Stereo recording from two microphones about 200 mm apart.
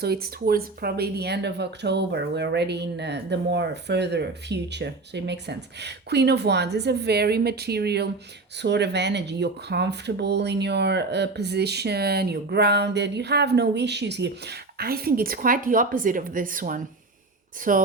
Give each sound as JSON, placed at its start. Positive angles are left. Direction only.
{"t": 0.0, "sound": "speech", "side_deg": -50}